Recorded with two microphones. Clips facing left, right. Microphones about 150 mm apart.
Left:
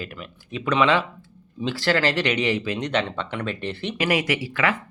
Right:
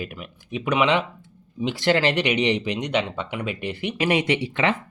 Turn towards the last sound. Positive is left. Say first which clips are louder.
# right 2 dB
turn(degrees=-25)  # may be behind; listen again after turning